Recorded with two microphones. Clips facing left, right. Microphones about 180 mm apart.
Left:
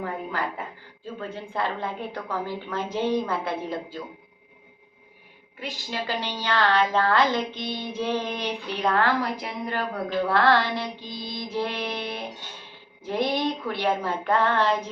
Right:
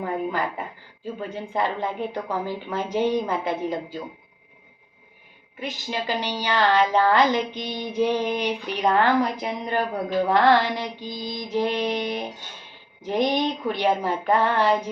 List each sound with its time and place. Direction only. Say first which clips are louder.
0.0 s a woman's voice: right 4 dB; 20° right (ahead or behind)
5.5 s a woman's voice: right 3 dB; 20° right (ahead or behind)